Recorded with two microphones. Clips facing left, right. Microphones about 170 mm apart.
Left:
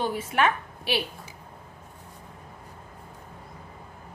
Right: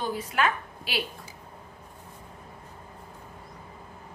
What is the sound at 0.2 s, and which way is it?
Speech, 25° left (ahead or behind).